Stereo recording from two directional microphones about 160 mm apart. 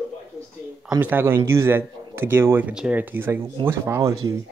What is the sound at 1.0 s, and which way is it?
A man's voice, 15° right (ahead or behind).